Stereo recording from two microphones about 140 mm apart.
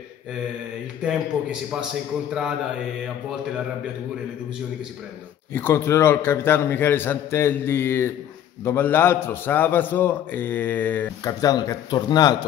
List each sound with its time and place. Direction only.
1.0 s a man's voice: 5° right (ahead or behind)
5.5 s a man's voice: 15° left (ahead or behind)
11.2 s speech: 25° left (ahead or behind)